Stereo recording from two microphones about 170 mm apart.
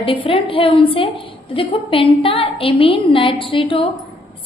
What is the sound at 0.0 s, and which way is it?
A woman's voice, 30° left (ahead or behind).